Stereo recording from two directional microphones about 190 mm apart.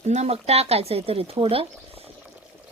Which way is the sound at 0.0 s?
35° right (ahead or behind).